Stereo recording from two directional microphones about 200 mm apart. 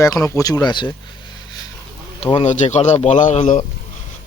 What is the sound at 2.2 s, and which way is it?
Speech, 30° left (ahead or behind).